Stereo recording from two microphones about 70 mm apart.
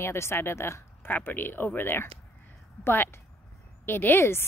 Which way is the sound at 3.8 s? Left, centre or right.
Left.